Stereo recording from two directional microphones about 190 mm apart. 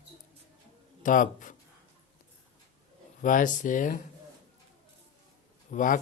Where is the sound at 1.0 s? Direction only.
45° left (ahead or behind).